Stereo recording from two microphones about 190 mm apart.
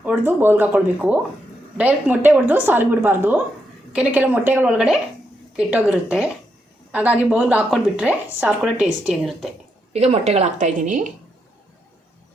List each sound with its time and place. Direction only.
0.0 s a woman's voice: 10° right (ahead or behind)
9.9 s a woman's voice: 35° right (ahead or behind)